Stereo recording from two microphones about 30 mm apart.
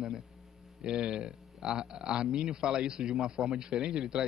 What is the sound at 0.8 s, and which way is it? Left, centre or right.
A man's voice, right.